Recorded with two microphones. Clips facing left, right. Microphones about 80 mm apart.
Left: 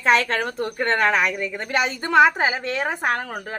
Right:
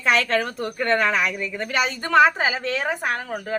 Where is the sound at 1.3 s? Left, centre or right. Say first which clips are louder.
Left 1 dB; left.